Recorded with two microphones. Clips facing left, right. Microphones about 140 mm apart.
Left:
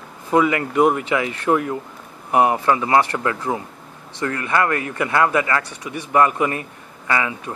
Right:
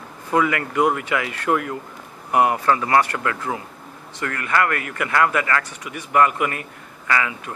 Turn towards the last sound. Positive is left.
turn(degrees=25)  # may be behind; listen again after turning